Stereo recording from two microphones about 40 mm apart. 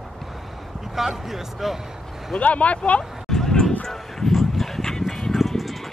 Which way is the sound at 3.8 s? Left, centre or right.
Centre.